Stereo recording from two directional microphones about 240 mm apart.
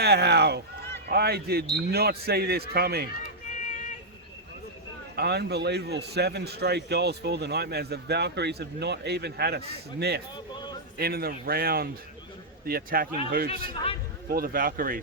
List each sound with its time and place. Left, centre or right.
0.0 s speech: right
3.5 s a sound: left
5.1 s a man's voice: right